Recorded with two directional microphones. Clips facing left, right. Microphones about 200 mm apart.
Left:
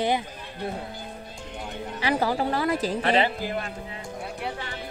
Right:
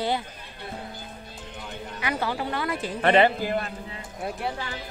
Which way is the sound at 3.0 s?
55° right (ahead or behind).